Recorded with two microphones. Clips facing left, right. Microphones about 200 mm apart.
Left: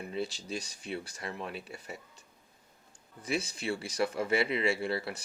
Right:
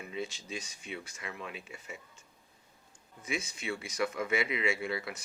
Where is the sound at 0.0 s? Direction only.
35° left (ahead or behind).